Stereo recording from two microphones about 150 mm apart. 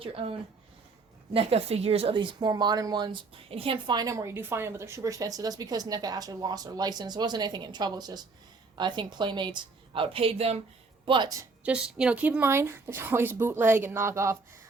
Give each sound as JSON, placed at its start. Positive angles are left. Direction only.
{"t": 0.0, "sound": "a woman's voice", "side_deg": -40}
{"t": 11.0, "sound": "a woman's voice", "side_deg": -30}
{"t": 11.6, "sound": "speech", "side_deg": -5}